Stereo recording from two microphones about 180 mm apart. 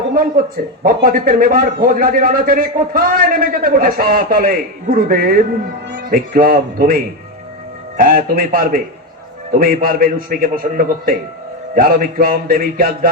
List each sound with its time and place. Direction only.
0.1 s a man's voice: 50° right (ahead or behind)